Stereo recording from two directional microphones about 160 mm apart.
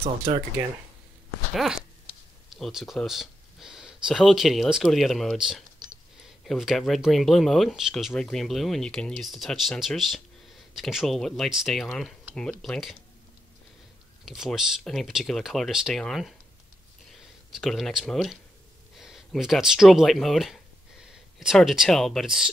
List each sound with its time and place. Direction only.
0.0 s speech: 35° right (ahead or behind)
1.5 s speech: centre (ahead or behind)
14.2 s speech: centre (ahead or behind)
17.6 s speech: centre (ahead or behind)